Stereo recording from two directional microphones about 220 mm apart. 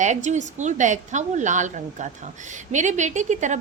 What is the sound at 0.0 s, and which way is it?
A woman's voice, 35° right (ahead or behind).